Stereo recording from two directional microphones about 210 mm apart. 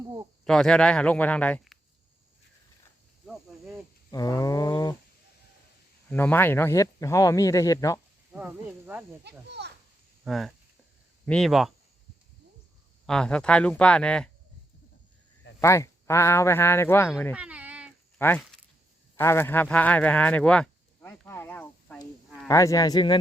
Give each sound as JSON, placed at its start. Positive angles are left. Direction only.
{"t": 0.4, "sound": "speech", "side_deg": 5}
{"t": 4.1, "sound": "speech", "side_deg": 15}
{"t": 6.1, "sound": "speech", "side_deg": 10}
{"t": 8.3, "sound": "speech", "side_deg": -5}
{"t": 9.5, "sound": "a child's voice", "side_deg": -55}
{"t": 10.2, "sound": "speech", "side_deg": 0}
{"t": 13.1, "sound": "speech", "side_deg": 5}
{"t": 15.6, "sound": "speech", "side_deg": 15}
{"t": 17.3, "sound": "a sound", "side_deg": -5}
{"t": 18.2, "sound": "a sound", "side_deg": 5}
{"t": 19.1, "sound": "speech", "side_deg": 10}